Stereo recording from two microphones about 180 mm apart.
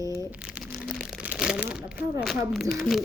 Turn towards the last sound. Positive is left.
turn(degrees=0)  # may be behind; listen again after turning